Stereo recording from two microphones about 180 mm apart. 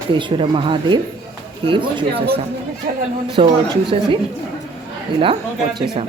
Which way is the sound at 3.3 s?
30° right (ahead or behind).